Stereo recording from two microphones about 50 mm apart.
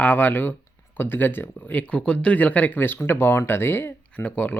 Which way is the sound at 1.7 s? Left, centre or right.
Left.